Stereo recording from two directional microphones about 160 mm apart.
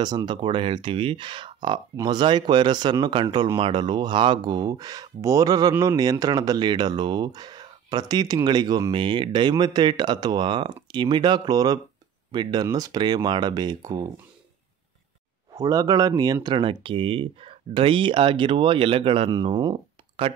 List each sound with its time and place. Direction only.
0.0 s speech: 30° right (ahead or behind)
15.5 s speech: 20° right (ahead or behind)